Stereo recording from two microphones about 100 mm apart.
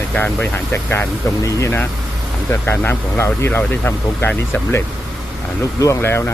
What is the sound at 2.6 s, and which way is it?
Speech, 20° left (ahead or behind).